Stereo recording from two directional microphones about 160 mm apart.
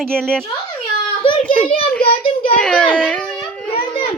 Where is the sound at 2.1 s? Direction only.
35° left (ahead or behind).